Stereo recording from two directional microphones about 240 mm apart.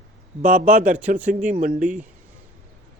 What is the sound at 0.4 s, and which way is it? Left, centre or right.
Speech, right.